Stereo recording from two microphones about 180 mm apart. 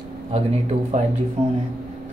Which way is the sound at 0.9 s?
40° right (ahead or behind).